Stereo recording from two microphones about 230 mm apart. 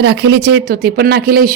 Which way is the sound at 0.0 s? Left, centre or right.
Right.